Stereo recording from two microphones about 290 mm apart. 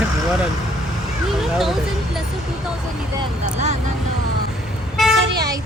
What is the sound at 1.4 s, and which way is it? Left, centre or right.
Speech, centre.